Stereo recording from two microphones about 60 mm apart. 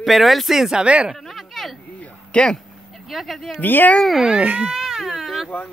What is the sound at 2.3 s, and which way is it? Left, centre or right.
Speech, centre.